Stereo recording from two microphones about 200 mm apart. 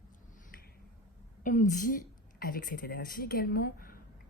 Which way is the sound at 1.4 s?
40° left (ahead or behind).